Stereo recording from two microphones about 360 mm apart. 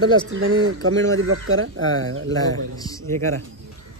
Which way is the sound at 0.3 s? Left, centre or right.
Right.